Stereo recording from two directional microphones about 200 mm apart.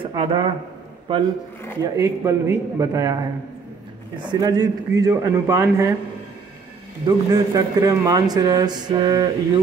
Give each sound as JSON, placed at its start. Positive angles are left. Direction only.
{"t": 0.0, "sound": "a man's voice", "side_deg": -25}
{"t": 2.0, "sound": "a man's voice", "side_deg": -15}
{"t": 4.2, "sound": "a man's voice", "side_deg": -20}
{"t": 7.1, "sound": "a man's voice", "side_deg": -20}